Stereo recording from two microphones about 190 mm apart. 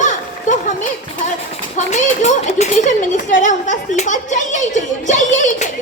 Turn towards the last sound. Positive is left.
turn(degrees=40)  # may be behind; listen again after turning